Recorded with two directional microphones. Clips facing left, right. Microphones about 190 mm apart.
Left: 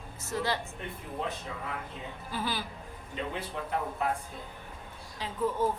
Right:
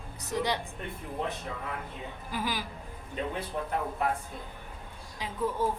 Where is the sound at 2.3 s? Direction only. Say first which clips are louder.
Right 1 dB; 10° right (ahead or behind).